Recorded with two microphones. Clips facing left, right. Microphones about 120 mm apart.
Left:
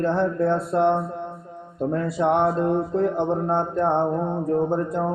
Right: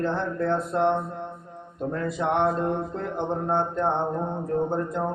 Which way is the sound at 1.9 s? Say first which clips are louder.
Left 4 dB; 35° left (ahead or behind).